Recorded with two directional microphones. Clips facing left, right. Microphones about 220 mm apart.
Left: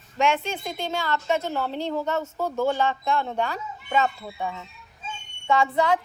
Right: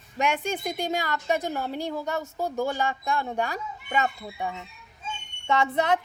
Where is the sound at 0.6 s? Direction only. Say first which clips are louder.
Right 1 dB; 15° right (ahead or behind).